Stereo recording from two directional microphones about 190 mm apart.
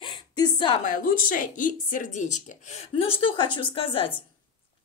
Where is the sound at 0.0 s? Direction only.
25° left (ahead or behind).